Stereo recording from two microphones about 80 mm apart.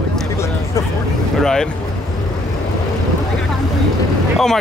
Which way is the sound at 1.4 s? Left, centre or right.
Centre.